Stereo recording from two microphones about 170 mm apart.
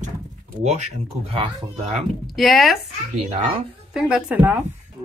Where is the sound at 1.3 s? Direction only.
35° right (ahead or behind).